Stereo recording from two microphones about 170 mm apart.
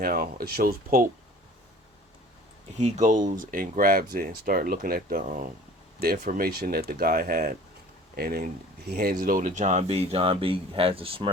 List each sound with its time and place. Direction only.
0.0 s speech: 60° right (ahead or behind)
2.7 s speech: 40° right (ahead or behind)